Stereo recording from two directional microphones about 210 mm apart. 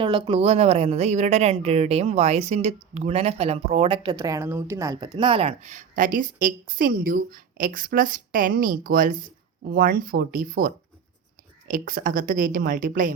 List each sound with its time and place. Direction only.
0.0 s speech: 25° right (ahead or behind); by 10.7 s 40° right (ahead or behind)
11.7 s speech: 40° right (ahead or behind)